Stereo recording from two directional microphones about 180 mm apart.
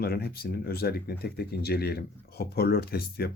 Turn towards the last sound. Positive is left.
turn(degrees=60)  # may be behind; listen again after turning